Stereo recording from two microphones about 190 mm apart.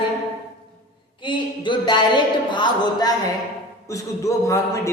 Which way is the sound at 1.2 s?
25° left (ahead or behind).